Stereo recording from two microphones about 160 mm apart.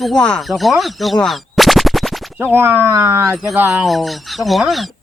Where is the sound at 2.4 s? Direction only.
15° right (ahead or behind).